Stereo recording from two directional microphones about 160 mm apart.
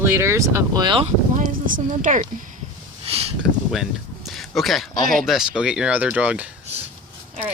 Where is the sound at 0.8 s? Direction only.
35° right (ahead or behind).